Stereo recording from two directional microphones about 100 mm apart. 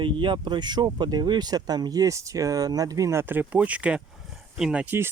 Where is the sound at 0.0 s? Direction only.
50° right (ahead or behind); by 4.9 s 10° right (ahead or behind).